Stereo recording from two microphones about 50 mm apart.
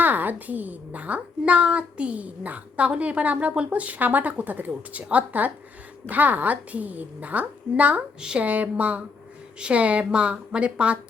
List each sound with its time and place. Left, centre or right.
0.0 s a woman's voice: right